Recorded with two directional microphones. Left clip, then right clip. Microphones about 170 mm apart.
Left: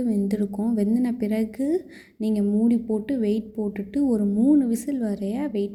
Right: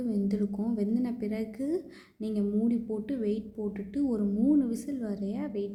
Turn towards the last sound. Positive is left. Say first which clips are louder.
# left 7 dB
turn(degrees=25)  # may be behind; listen again after turning